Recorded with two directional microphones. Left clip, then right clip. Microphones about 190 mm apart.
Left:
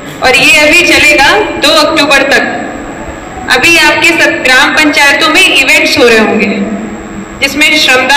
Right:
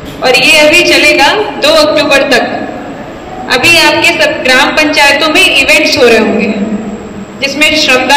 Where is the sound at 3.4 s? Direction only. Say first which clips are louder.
Left 1 dB; 35° left (ahead or behind).